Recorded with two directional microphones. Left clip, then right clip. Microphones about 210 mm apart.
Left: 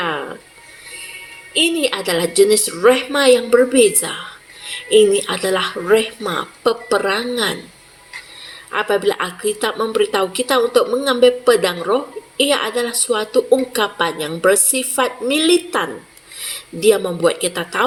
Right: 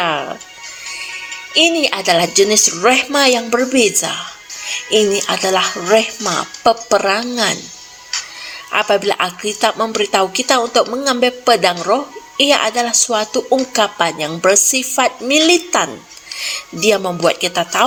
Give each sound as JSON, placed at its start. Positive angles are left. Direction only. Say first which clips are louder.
{"t": 0.0, "sound": "music", "louder": "right 4 dB", "side_deg": -30}
{"t": 1.8, "sound": "a woman's voice", "louder": "right 4 dB", "side_deg": -30}
{"t": 8.7, "sound": "a woman's voice", "louder": "right 3 dB", "side_deg": -30}
{"t": 16.9, "sound": "a woman's voice", "louder": "right 1 dB", "side_deg": -30}